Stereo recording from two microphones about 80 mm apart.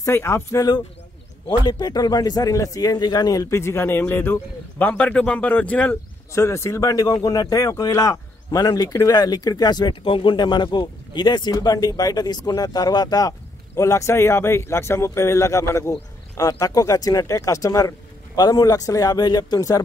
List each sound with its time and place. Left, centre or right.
0.0 s speech: left
1.6 s speech: left; by 5.9 s centre
6.3 s speech: left
11.6 s speech: left
13.7 s speech: left
16.3 s speech: left